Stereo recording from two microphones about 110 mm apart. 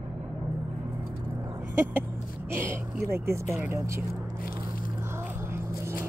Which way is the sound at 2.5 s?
25° right (ahead or behind).